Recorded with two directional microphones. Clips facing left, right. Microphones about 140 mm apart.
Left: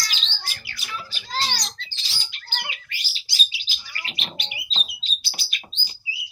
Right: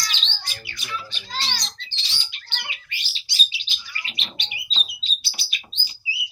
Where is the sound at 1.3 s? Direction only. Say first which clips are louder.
Left 3 dB; 40° left (ahead or behind).